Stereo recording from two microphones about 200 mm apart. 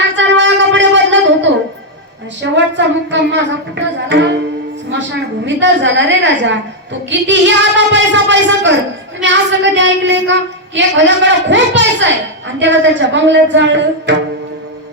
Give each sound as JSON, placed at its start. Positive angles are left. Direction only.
{"t": 0.2, "sound": "a sound", "side_deg": -65}
{"t": 2.4, "sound": "speech", "side_deg": -65}
{"t": 5.5, "sound": "speech", "side_deg": -65}